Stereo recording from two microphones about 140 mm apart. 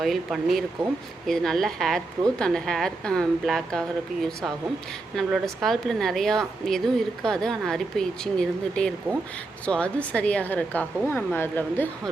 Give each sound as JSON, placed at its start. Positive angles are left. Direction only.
{"t": 0.0, "sound": "a woman's voice", "side_deg": 0}